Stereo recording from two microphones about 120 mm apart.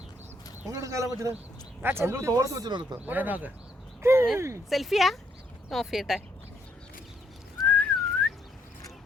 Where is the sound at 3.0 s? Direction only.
15° right (ahead or behind).